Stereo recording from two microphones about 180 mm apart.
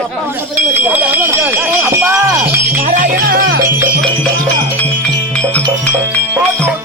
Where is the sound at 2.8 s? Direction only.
45° right (ahead or behind).